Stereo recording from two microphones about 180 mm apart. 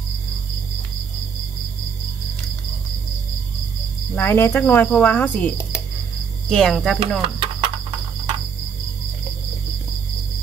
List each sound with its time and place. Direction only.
4.1 s cricket: 10° left (ahead or behind)
6.5 s speech: 5° left (ahead or behind)
7.2 s snake: 30° right (ahead or behind)